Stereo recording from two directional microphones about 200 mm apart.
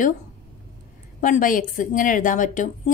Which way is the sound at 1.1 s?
40° left (ahead or behind).